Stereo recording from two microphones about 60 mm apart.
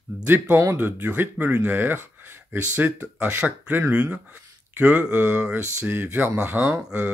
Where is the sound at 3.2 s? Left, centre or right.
Right.